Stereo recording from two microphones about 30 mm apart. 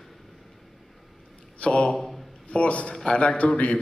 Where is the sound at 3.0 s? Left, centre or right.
Left.